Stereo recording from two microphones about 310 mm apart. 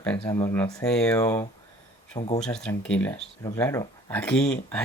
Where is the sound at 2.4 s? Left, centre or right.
Centre.